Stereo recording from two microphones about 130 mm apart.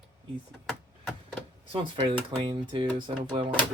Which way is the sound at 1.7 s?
40° right (ahead or behind).